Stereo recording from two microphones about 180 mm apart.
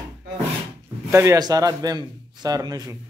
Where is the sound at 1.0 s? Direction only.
15° right (ahead or behind).